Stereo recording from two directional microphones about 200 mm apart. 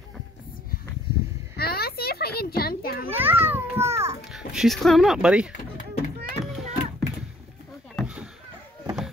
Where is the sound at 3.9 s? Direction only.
15° right (ahead or behind).